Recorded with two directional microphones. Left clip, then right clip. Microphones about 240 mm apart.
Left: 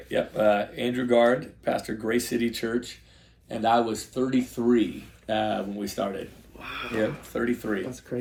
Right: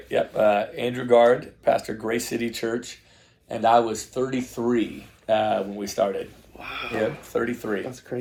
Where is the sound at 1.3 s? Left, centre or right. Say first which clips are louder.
Right 5 dB; centre.